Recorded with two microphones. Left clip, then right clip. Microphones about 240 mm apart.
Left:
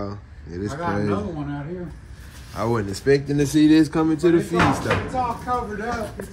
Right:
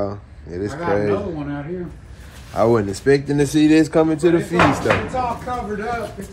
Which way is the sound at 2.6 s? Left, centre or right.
Centre.